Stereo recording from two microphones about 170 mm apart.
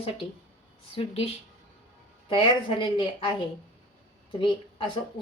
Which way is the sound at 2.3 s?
30° left (ahead or behind).